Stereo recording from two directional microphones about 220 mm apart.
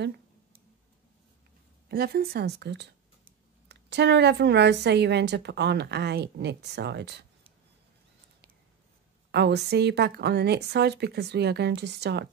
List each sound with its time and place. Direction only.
1.9 s a woman's voice: 45° right (ahead or behind)
9.3 s a woman's voice: 50° right (ahead or behind)